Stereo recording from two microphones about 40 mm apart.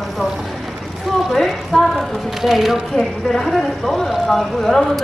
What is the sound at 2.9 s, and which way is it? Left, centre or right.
Speech, centre.